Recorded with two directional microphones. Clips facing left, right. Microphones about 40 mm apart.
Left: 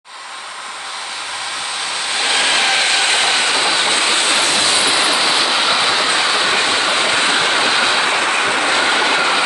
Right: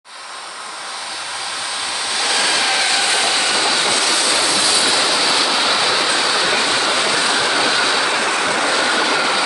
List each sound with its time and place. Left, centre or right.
2.1 s train: left
6.0 s vehicle: left